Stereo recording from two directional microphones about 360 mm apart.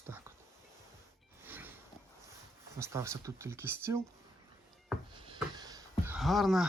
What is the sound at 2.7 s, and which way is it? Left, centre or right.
Speech, centre.